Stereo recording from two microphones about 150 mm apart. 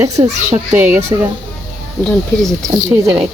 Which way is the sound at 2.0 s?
5° left (ahead or behind).